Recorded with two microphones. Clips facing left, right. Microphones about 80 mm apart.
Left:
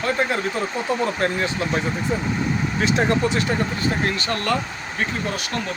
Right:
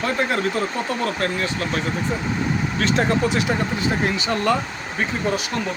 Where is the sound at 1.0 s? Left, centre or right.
Left.